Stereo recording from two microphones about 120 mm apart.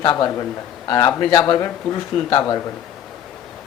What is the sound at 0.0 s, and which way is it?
Speech, 35° left (ahead or behind).